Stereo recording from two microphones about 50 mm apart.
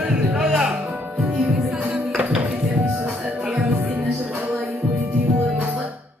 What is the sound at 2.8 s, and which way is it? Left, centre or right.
Music, right.